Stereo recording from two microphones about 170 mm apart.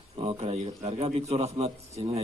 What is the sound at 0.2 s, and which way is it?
A man's voice, 35° right (ahead or behind).